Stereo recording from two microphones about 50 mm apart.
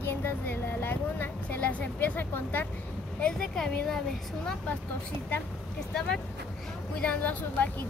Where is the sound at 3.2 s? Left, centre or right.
Left.